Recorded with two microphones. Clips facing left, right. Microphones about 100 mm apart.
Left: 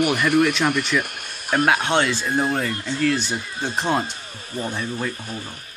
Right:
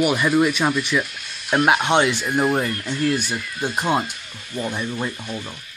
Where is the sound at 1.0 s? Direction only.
50° left (ahead or behind).